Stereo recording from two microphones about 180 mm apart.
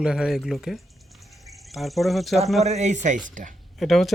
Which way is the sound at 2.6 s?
40° right (ahead or behind).